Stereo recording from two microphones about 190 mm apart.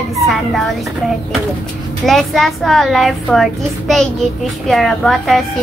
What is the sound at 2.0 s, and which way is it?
A woman's voice, centre (ahead or behind).